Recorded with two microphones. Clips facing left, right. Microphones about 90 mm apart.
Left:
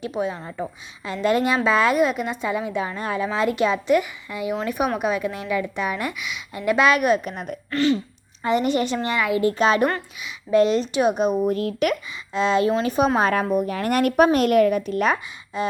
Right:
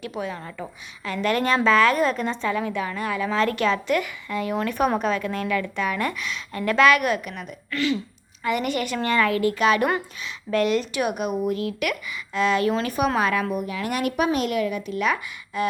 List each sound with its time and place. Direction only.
0.0 s a woman's voice: 25° left (ahead or behind)
7.3 s a woman's voice: 40° left (ahead or behind)
8.4 s a woman's voice: 25° left (ahead or behind)
9.4 s a woman's voice: 30° left (ahead or behind)
12.3 s a woman's voice: 25° left (ahead or behind); by 15.2 s 40° left (ahead or behind)
15.5 s a woman's voice: 25° left (ahead or behind)